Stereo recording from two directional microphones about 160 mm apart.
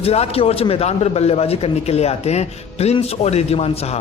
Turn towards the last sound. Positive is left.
turn(degrees=40)  # may be behind; listen again after turning